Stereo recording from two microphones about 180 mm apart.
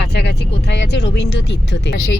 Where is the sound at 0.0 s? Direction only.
70° left (ahead or behind).